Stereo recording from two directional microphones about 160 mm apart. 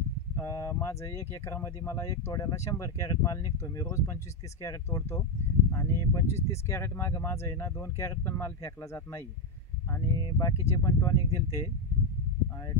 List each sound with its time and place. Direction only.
0.4 s speech: 20° left (ahead or behind)
9.8 s a sound: 20° left (ahead or behind)
10.7 s speech: 20° left (ahead or behind)